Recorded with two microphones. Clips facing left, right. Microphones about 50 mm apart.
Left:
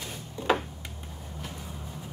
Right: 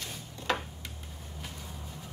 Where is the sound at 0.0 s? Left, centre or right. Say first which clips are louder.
Left 5 dB; centre.